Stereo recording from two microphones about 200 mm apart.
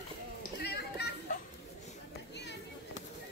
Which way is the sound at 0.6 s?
55° left (ahead or behind).